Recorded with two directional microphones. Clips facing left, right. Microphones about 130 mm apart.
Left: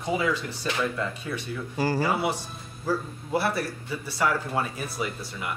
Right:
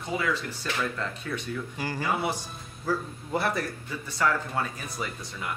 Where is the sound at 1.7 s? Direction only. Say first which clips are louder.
Left 12 dB; 35° left (ahead or behind).